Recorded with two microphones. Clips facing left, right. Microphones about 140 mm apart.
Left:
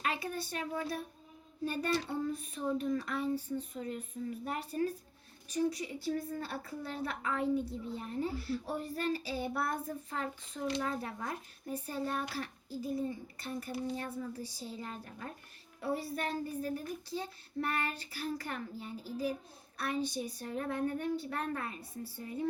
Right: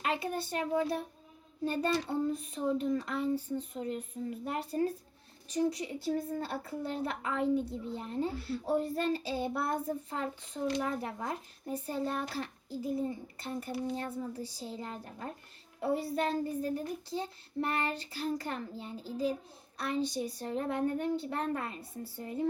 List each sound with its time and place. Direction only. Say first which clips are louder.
0.0 s a child's voice: right 3 dB; 25° right (ahead or behind)